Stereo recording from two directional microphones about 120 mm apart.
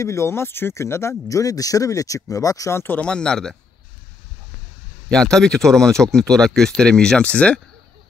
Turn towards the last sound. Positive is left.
turn(degrees=10)  # may be behind; listen again after turning